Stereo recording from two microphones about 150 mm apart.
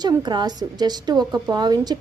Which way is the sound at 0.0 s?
30° right (ahead or behind).